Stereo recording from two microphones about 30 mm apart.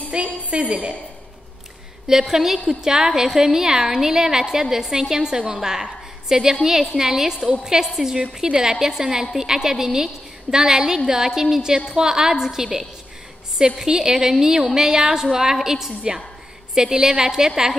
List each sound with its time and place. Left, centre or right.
0.2 s a woman's voice: right
2.0 s a woman's voice: centre
5.5 s a sound: centre
6.3 s a woman's voice: right